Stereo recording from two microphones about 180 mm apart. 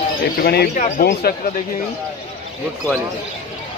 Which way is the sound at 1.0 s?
60° left (ahead or behind).